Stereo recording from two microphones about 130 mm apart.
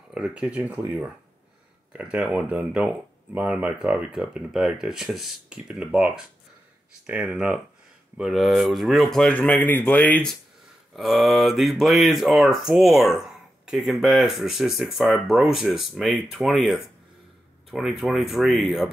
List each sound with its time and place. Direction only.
0.1 s speech: 5° right (ahead or behind); by 10.0 s 15° left (ahead or behind)
10.9 s speech: centre (ahead or behind)